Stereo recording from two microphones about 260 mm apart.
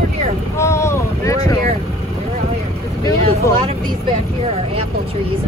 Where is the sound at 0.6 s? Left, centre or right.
Centre.